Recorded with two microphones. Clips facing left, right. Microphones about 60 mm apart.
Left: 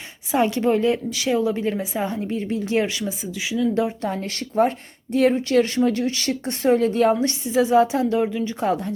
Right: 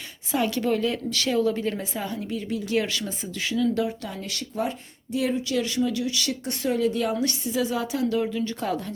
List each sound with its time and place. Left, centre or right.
0.3 s a woman's voice: left
2.0 s speech: left; by 3.7 s centre
3.8 s speech: left
4.1 s speech: left